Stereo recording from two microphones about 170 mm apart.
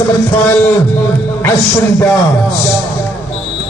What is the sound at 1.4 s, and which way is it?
Speech, 15° left (ahead or behind).